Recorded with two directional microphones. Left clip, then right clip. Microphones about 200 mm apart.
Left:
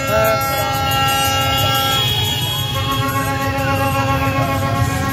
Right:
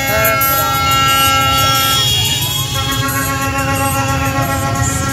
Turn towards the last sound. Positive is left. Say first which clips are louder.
# right 2 dB
turn(degrees=35)  # may be behind; listen again after turning